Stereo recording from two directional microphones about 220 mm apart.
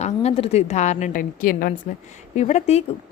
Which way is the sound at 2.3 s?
30° left (ahead or behind).